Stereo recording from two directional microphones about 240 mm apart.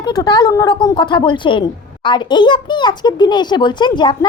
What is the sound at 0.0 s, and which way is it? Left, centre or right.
A child's voice, centre.